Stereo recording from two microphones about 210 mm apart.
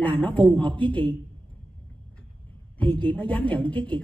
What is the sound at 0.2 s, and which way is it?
Speech, 10° left (ahead or behind).